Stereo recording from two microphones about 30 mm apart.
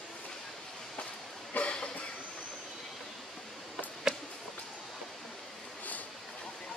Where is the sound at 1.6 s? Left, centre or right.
Left.